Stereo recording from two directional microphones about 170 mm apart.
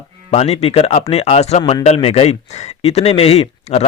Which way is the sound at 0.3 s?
40° left (ahead or behind).